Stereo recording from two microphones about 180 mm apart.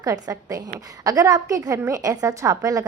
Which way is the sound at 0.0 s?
20° right (ahead or behind).